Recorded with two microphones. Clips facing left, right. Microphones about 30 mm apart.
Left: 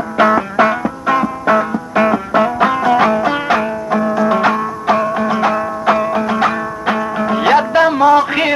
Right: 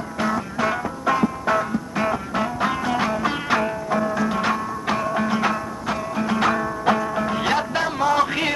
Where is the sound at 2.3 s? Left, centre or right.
Left.